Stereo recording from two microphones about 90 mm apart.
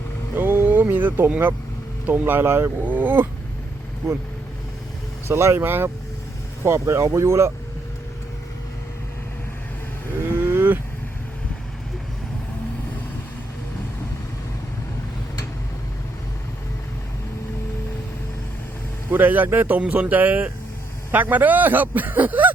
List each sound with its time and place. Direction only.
0.3 s a sound: 25° right (ahead or behind)
1.3 s a man's voice: 25° right (ahead or behind)
5.3 s a man's voice: 30° right (ahead or behind)
10.4 s vehicle: 20° right (ahead or behind)
19.1 s a man's voice: 20° right (ahead or behind)